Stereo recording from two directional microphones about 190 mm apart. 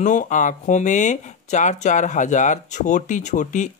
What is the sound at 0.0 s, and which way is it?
Speech, 40° left (ahead or behind).